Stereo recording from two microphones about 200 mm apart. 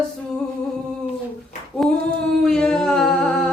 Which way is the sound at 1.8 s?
Centre (ahead or behind).